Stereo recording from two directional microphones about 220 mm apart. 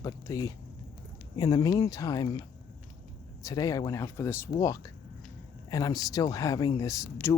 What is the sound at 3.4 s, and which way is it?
Speech, 15° left (ahead or behind).